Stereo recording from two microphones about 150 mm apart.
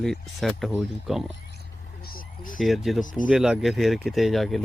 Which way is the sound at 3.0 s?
60° left (ahead or behind).